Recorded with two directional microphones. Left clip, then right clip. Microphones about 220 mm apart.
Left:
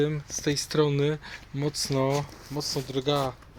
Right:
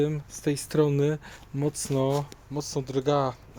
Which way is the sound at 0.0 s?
15° right (ahead or behind).